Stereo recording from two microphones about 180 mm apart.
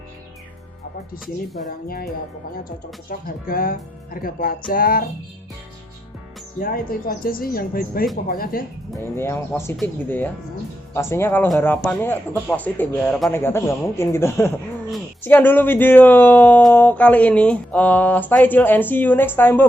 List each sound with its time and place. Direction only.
1.6 s speech: 55° left (ahead or behind)
3.1 s speech: 55° left (ahead or behind)
6.6 s speech: 55° left (ahead or behind)
9.1 s speech: 15° left (ahead or behind)